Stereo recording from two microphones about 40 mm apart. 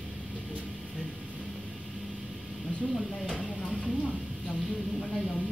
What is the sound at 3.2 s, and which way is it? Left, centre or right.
Speech, left.